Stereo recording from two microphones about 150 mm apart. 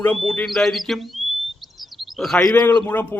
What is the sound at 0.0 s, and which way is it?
Speech, 5° left (ahead or behind).